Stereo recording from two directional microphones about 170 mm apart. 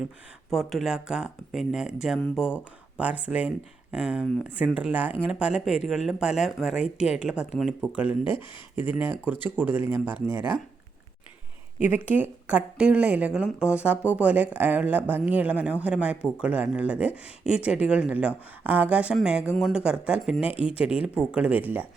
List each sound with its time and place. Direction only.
0.5 s speech: centre (ahead or behind)
2.1 s speech: 5° left (ahead or behind)
3.0 s speech: 10° right (ahead or behind)
8.2 s speech: 30° left (ahead or behind)
8.7 s speech: 10° right (ahead or behind)
11.8 s speech: 10° right (ahead or behind)
20.4 s speech: 35° left (ahead or behind)
20.7 s speech: 5° right (ahead or behind)